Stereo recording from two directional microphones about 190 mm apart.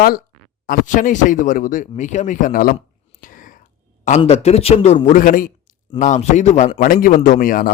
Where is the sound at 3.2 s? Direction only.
45° left (ahead or behind).